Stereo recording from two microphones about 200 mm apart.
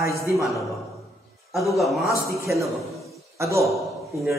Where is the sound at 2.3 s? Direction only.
15° right (ahead or behind).